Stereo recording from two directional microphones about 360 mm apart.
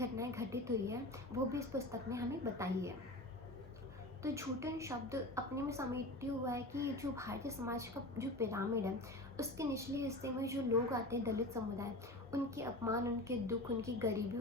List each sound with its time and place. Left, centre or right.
0.0 s a woman's voice: centre
4.2 s a woman's voice: centre